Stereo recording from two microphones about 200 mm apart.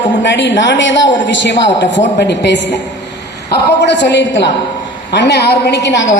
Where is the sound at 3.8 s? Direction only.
60° left (ahead or behind).